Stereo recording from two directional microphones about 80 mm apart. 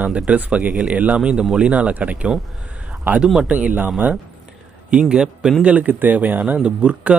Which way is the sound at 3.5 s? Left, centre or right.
Centre.